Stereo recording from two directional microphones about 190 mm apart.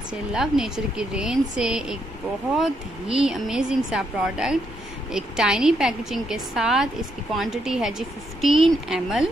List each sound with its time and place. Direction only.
0.3 s a woman's voice: centre (ahead or behind)